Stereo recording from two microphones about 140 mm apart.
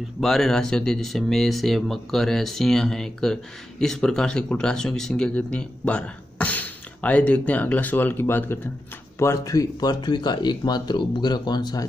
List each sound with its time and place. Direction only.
0.2 s speech: centre (ahead or behind); by 11.8 s 30° left (ahead or behind)